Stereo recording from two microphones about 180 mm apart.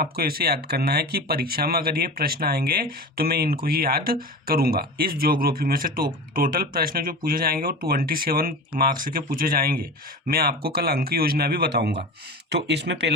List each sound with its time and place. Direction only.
0.0 s speech: 55° right (ahead or behind); by 13.1 s 70° right (ahead or behind)